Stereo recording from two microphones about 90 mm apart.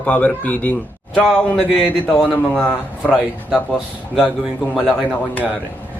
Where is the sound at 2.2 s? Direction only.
10° right (ahead or behind).